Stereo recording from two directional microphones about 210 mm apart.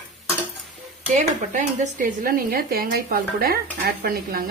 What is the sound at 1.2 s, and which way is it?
Speech, 35° right (ahead or behind).